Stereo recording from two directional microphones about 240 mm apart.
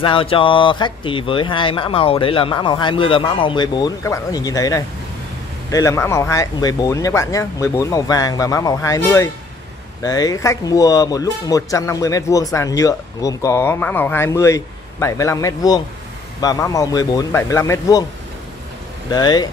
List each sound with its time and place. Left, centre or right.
0.0 s speech: left
19.0 s speech: centre